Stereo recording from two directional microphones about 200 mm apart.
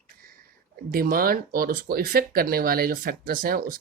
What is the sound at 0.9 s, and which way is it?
Speech, 45° right (ahead or behind).